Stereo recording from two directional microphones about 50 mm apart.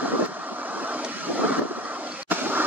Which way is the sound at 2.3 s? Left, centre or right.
Right.